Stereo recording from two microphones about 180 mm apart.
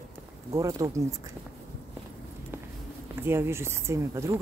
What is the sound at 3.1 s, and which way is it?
Speech, 15° right (ahead or behind).